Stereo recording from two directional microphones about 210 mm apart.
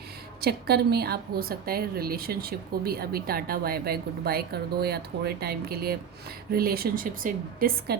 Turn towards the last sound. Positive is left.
turn(degrees=-40)  # may be behind; listen again after turning